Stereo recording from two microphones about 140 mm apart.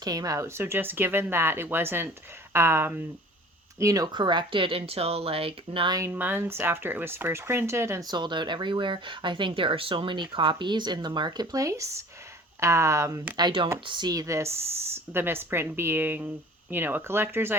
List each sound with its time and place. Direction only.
0.0 s speech: 25° right (ahead or behind)
6.0 s speech: 15° right (ahead or behind)
8.1 s speech: 35° right (ahead or behind); by 17.5 s 15° right (ahead or behind)